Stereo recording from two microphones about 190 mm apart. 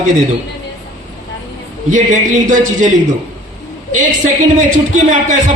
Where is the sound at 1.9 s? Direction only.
40° right (ahead or behind).